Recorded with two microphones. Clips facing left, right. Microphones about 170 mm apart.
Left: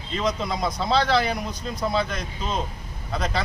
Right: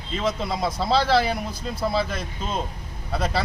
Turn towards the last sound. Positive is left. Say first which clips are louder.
# right 2 dB
turn(degrees=-5)  # may be behind; listen again after turning